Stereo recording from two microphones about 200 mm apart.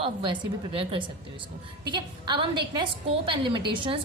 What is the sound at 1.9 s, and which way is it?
A woman's voice, 20° right (ahead or behind).